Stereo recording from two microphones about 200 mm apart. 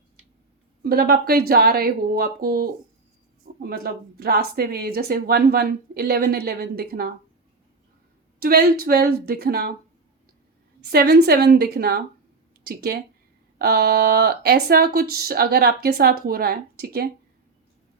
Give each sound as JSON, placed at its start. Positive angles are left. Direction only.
{"t": 0.9, "sound": "speech", "side_deg": -50}
{"t": 8.4, "sound": "speech", "side_deg": -50}
{"t": 10.8, "sound": "speech", "side_deg": -50}